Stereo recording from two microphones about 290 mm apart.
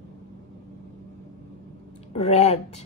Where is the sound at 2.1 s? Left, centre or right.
Left.